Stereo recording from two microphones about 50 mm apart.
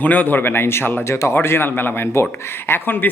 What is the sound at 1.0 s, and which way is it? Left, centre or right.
Speech, left.